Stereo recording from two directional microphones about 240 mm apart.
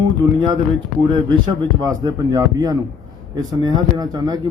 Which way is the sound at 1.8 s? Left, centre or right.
Centre.